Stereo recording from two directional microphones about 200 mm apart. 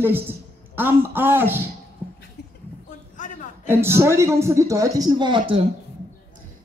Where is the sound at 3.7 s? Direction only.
10° right (ahead or behind).